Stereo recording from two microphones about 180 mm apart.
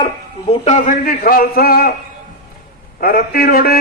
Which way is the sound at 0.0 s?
35° left (ahead or behind).